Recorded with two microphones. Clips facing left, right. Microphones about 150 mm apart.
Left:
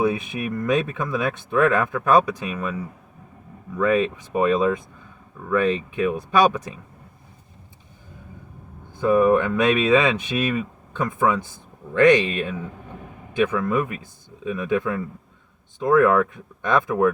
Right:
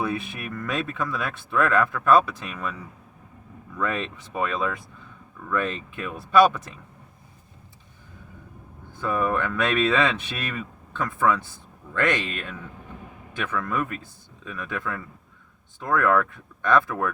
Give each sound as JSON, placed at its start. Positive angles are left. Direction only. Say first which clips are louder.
{"t": 0.0, "sound": "speech", "louder": "left 6 dB", "side_deg": 15}
{"t": 6.1, "sound": "speech", "louder": "right 1 dB", "side_deg": 10}
{"t": 9.0, "sound": "speech", "louder": "left 8 dB", "side_deg": 15}